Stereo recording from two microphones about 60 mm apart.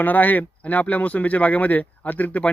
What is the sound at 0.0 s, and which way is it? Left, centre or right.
Speech, left.